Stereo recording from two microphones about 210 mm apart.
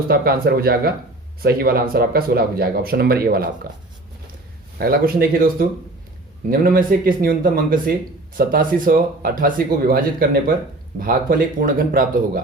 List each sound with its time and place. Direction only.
0.1 s speech: 45° right (ahead or behind)
4.8 s speech: 45° right (ahead or behind)